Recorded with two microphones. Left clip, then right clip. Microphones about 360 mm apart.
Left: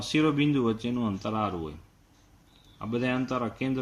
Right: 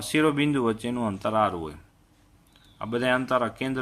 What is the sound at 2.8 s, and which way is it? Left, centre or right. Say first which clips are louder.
Speech: right 5 dB; right.